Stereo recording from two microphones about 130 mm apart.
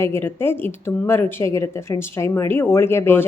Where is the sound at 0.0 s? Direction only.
20° left (ahead or behind).